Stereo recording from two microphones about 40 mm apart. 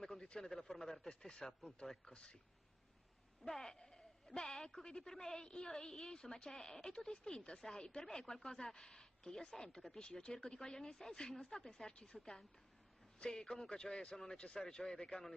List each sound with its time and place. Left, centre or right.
0.2 s a sound: centre
0.6 s a woman's voice: centre
3.4 s a woman's voice: centre
3.9 s a sound: centre
4.8 s a woman's voice: centre
13.2 s a woman's voice: centre